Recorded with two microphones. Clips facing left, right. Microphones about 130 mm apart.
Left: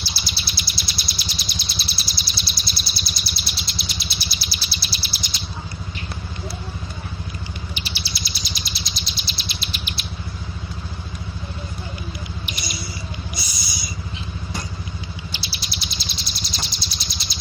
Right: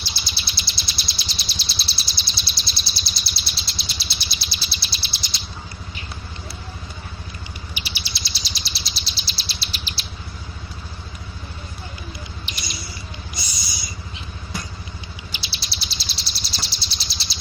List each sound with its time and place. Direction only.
0.1 s bird: 25° right (ahead or behind)
7.7 s bird: 10° right (ahead or behind)
8.1 s chirp: 30° right (ahead or behind)
15.3 s bird: 30° right (ahead or behind)